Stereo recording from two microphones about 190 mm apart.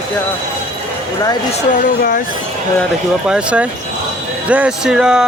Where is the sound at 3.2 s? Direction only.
5° right (ahead or behind).